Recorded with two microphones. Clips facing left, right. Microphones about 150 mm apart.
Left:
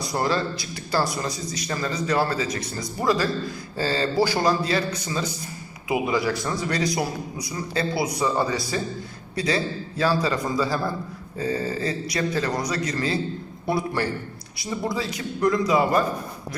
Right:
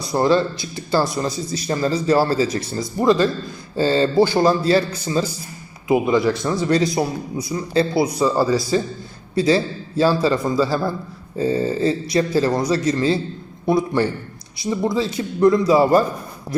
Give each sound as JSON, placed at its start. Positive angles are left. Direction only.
{"t": 0.1, "sound": "a man's voice", "side_deg": -25}
{"t": 8.4, "sound": "speech", "side_deg": -5}
{"t": 9.3, "sound": "a man's voice", "side_deg": -25}